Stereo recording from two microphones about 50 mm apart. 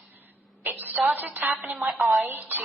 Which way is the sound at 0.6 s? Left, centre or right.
Right.